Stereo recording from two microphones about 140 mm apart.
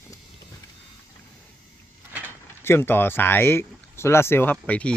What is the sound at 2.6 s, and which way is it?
Speech, 15° left (ahead or behind).